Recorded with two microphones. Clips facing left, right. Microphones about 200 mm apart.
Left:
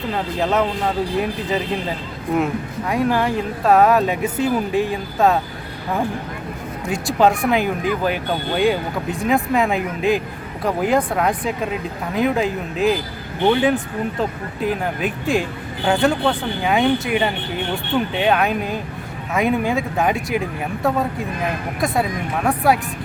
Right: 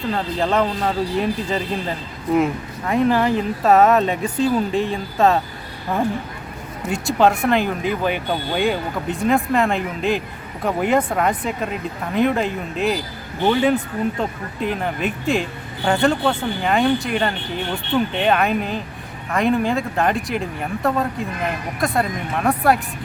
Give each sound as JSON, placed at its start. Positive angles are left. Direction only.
{"t": 0.1, "sound": "speech", "side_deg": 5}
{"t": 6.8, "sound": "speech", "side_deg": 0}